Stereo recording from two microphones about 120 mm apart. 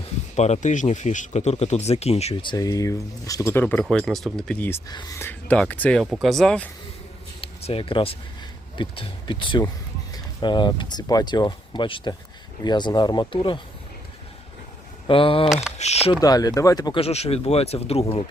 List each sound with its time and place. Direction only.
0.3 s speech: 70° left (ahead or behind)
2.6 s speech: 30° left (ahead or behind)
3.5 s speech: 15° left (ahead or behind)
7.4 s speech: 50° left (ahead or behind)
15.0 s speech: 50° left (ahead or behind)
15.8 s speech: 65° left (ahead or behind)
16.2 s speech: 30° left (ahead or behind)
17.0 s speech: 60° left (ahead or behind)